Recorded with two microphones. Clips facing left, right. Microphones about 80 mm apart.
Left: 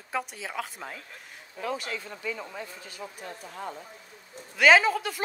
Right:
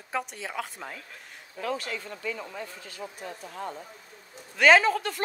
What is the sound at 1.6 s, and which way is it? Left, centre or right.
Speech, centre.